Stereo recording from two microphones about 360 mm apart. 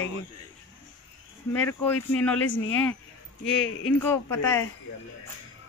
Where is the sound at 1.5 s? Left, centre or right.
Centre.